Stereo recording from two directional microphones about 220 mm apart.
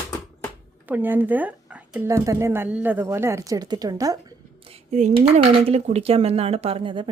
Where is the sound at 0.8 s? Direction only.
10° right (ahead or behind).